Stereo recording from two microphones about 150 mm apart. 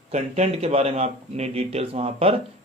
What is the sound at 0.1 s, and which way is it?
A man's voice, 45° right (ahead or behind).